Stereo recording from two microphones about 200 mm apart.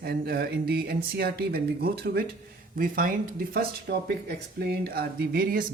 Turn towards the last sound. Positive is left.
turn(degrees=-50)  # may be behind; listen again after turning